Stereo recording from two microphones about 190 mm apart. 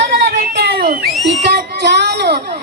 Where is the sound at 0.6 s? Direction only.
55° right (ahead or behind).